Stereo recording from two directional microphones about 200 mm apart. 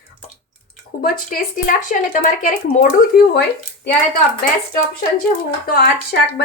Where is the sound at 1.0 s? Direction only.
45° left (ahead or behind).